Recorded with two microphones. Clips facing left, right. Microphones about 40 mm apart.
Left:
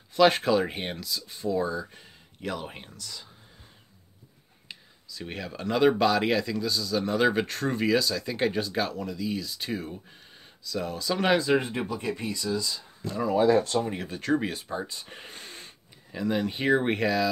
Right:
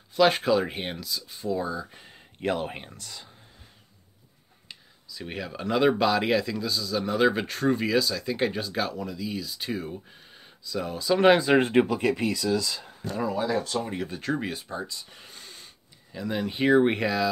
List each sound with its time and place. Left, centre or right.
0.1 s speech: centre
2.4 s speech: right
2.7 s speech: right
5.1 s speech: centre
11.2 s speech: right
11.7 s speech: right
13.5 s speech: left
13.7 s speech: centre
14.9 s a sound: left
16.1 s speech: centre